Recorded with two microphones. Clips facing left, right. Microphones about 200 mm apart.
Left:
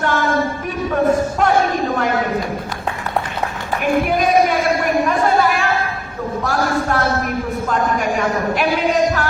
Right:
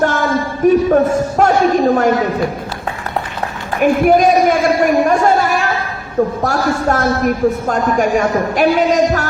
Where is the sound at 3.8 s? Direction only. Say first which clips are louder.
Right 7 dB; 45° right (ahead or behind).